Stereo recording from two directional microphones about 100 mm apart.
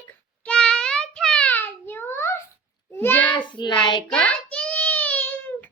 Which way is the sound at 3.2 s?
50° left (ahead or behind).